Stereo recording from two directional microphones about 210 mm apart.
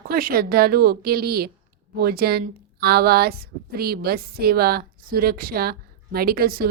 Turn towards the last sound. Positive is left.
turn(degrees=-45)  # may be behind; listen again after turning